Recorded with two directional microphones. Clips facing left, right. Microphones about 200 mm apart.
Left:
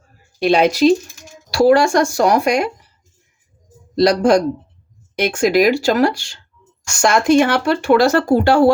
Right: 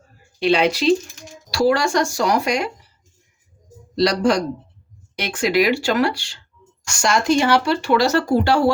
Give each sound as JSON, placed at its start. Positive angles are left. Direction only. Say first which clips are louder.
{"t": 0.3, "sound": "speech", "louder": "left 4 dB", "side_deg": 45}
{"t": 1.5, "sound": "speech", "louder": "left 6 dB", "side_deg": 55}
{"t": 3.9, "sound": "speech", "louder": "left 5 dB", "side_deg": 50}
{"t": 7.0, "sound": "speech", "louder": "left 5 dB", "side_deg": 55}